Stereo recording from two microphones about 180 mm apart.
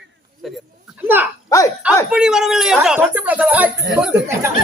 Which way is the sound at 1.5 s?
15° left (ahead or behind).